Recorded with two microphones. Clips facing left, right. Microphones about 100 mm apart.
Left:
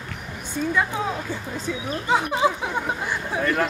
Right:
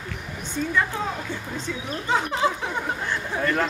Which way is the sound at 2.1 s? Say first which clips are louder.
Left 2 dB; 10° left (ahead or behind).